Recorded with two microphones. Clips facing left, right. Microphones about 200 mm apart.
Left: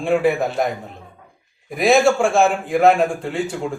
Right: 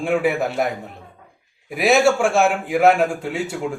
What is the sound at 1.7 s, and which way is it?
A man's voice, 5° right (ahead or behind).